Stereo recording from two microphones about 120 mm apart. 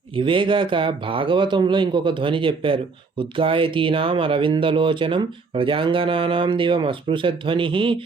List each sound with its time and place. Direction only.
0.2 s speech: 45° right (ahead or behind)